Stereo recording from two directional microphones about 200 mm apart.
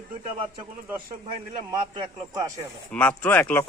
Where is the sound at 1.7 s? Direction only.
20° right (ahead or behind).